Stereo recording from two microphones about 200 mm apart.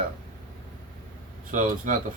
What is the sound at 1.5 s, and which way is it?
Speech, 40° right (ahead or behind).